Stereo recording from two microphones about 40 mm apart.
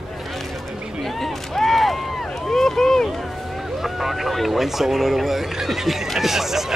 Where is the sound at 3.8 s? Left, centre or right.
Centre.